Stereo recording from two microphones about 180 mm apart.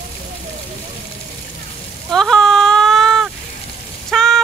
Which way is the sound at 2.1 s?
5° left (ahead or behind).